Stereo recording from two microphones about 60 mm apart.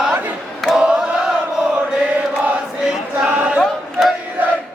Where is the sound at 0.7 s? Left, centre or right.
Centre.